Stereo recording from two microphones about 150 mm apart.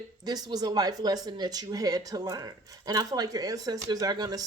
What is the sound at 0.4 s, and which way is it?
Speech, 25° right (ahead or behind).